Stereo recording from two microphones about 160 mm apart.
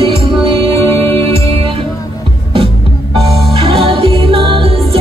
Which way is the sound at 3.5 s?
35° right (ahead or behind).